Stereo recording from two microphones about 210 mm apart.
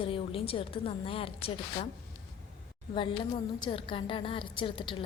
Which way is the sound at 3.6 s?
25° left (ahead or behind).